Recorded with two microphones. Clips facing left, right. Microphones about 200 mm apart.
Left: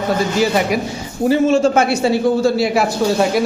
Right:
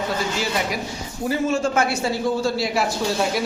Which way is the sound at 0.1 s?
55° left (ahead or behind).